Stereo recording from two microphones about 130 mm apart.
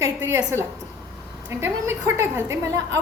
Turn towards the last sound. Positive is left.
turn(degrees=-25)  # may be behind; listen again after turning